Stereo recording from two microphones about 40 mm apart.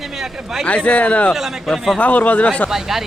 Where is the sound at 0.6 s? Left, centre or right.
Left.